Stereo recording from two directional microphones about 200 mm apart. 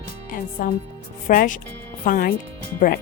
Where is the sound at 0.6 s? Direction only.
45° left (ahead or behind).